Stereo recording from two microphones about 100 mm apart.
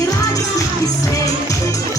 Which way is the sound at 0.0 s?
35° left (ahead or behind).